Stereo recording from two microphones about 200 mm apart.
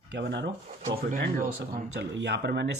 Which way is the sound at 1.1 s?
45° right (ahead or behind).